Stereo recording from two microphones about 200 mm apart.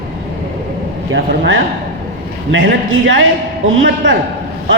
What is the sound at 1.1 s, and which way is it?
A man's voice, 65° right (ahead or behind).